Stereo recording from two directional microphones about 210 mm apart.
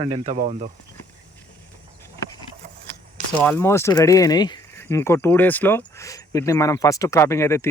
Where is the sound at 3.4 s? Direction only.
10° left (ahead or behind).